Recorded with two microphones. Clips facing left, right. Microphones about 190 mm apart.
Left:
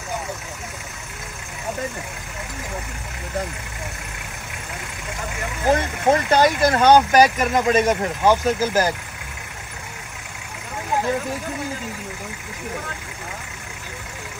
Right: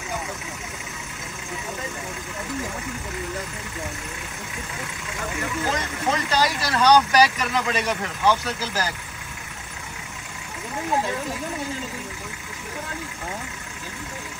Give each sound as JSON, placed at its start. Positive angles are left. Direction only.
{"t": 5.7, "sound": "speech", "side_deg": 55}